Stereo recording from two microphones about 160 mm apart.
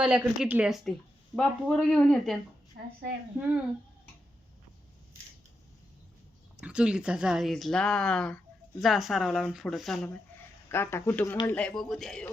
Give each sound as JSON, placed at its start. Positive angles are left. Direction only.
{"t": 0.0, "sound": "speech", "side_deg": -5}
{"t": 6.6, "sound": "speech", "side_deg": -5}
{"t": 10.7, "sound": "speech", "side_deg": 15}